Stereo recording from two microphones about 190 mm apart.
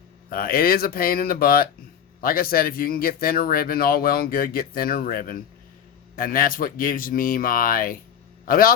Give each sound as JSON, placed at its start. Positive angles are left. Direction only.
{"t": 0.3, "sound": "speech", "side_deg": 50}